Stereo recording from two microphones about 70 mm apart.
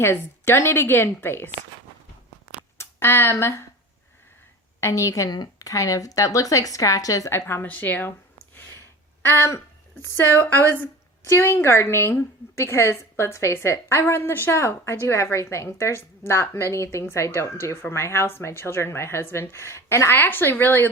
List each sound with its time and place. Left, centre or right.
0.0 s a woman's voice: left
2.7 s speech: left
4.8 s speech: left
5.3 s speech: left
7.3 s a woman's voice: left
9.3 s a woman's voice: left